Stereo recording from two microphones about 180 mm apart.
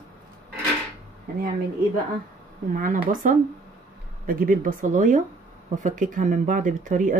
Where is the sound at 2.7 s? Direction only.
50° right (ahead or behind).